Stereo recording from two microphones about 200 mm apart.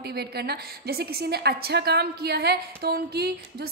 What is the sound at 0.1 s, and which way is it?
A woman's voice, 55° right (ahead or behind).